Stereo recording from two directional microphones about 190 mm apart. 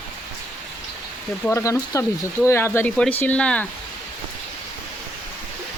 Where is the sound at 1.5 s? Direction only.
15° left (ahead or behind).